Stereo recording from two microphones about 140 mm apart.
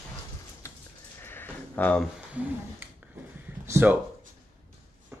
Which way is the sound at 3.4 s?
15° right (ahead or behind).